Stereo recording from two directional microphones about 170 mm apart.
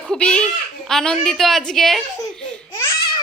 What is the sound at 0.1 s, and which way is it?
A child's voice, 5° left (ahead or behind).